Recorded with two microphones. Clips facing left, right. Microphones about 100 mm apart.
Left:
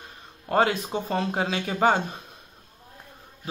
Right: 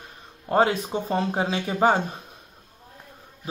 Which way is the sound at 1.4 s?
25° right (ahead or behind).